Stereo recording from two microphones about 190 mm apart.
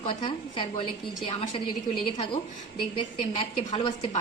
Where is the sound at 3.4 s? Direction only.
25° left (ahead or behind).